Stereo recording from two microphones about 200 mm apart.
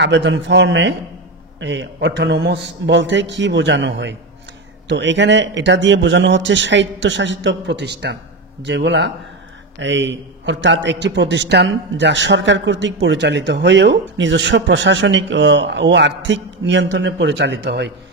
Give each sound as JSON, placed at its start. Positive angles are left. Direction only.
{"t": 0.0, "sound": "a man's voice", "side_deg": -60}